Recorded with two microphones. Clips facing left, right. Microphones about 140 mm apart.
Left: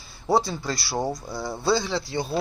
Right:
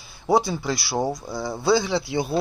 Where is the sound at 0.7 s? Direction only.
5° right (ahead or behind).